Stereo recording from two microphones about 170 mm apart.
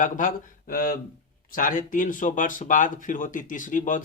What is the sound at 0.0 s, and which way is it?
Speech, 50° left (ahead or behind).